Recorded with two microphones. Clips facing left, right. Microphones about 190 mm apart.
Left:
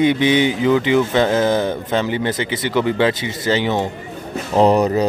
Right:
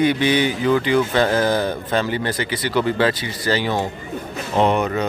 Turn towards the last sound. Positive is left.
turn(degrees=35)  # may be behind; listen again after turning